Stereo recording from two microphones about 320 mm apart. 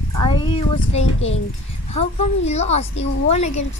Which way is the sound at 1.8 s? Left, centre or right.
Centre.